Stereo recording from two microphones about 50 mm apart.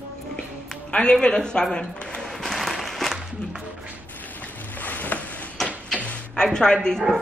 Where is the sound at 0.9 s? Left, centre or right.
Centre.